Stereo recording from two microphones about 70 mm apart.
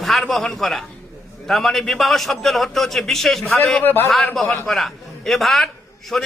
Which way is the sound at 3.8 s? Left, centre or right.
Left.